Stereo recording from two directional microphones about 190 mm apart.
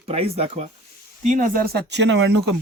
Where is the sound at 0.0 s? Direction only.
30° right (ahead or behind).